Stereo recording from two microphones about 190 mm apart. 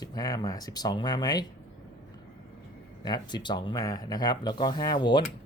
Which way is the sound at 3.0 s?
20° left (ahead or behind).